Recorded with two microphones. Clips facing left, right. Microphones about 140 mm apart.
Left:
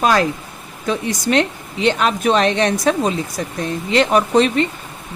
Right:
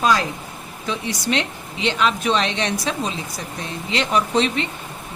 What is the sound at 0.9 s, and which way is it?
Speech, 50° left (ahead or behind).